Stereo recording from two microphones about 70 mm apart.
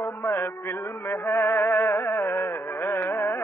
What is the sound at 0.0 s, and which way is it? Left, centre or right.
Music, left.